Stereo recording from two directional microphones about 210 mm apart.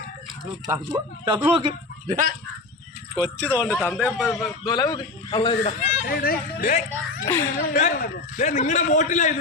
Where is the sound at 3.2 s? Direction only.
15° right (ahead or behind).